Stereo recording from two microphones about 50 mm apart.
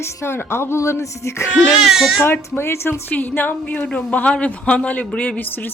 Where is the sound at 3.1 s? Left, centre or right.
Left.